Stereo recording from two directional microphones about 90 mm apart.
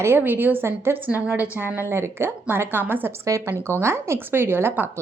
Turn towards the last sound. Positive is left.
turn(degrees=-25)  # may be behind; listen again after turning